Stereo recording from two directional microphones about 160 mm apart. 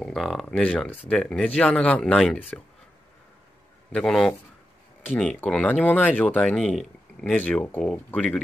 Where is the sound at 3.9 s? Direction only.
5° left (ahead or behind).